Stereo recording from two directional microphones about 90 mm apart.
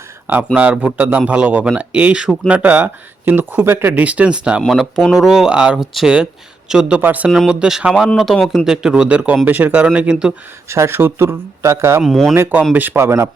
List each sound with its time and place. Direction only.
0.5 s speech: 15° right (ahead or behind)
4.6 s speech: centre (ahead or behind); by 7.3 s 20° right (ahead or behind)
7.3 s speech: 5° right (ahead or behind)
10.7 s speech: 30° right (ahead or behind)
12.0 s speech: centre (ahead or behind)
12.3 s speech: 25° right (ahead or behind)